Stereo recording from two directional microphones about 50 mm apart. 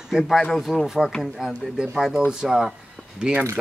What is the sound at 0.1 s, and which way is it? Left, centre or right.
Speech, centre.